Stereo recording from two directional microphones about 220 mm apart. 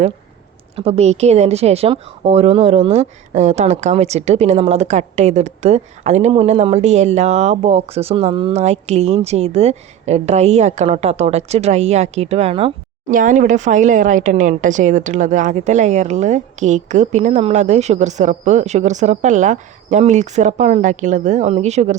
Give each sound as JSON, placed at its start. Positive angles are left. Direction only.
{"t": 0.8, "sound": "a woman's voice", "side_deg": -30}
{"t": 13.1, "sound": "speech", "side_deg": -35}